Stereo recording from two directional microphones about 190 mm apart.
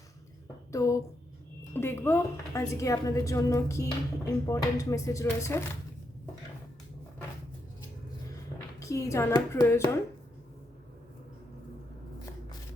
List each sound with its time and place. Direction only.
0.7 s a woman's voice: 15° left (ahead or behind)
8.8 s a woman's voice: 15° left (ahead or behind)